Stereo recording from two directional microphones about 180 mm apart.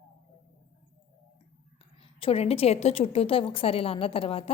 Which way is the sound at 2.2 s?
35° left (ahead or behind).